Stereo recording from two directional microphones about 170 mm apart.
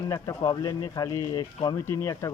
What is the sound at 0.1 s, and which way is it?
Speech, 20° left (ahead or behind).